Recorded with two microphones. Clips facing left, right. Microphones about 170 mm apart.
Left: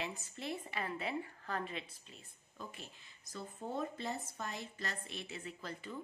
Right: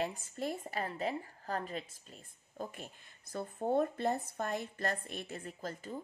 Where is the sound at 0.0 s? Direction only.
45° right (ahead or behind).